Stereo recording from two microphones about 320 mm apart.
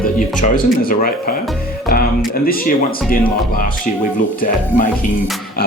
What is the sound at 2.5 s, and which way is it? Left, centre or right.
Speech, left.